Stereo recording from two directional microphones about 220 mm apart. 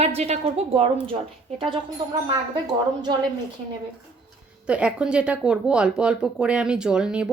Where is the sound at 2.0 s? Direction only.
20° right (ahead or behind).